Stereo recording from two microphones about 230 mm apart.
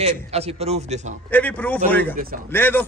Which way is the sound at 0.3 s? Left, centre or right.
Right.